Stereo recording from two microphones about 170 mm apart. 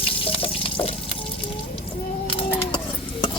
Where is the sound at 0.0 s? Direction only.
30° left (ahead or behind).